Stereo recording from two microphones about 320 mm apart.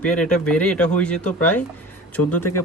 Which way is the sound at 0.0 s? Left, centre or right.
Centre.